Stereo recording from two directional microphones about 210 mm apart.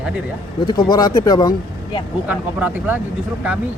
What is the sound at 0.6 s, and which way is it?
Speech, 20° left (ahead or behind).